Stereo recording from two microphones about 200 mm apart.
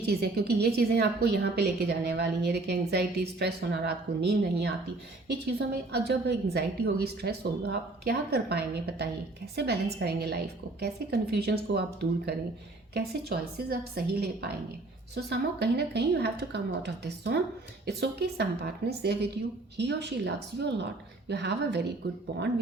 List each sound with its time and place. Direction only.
0.0 s a woman's voice: 55° right (ahead or behind)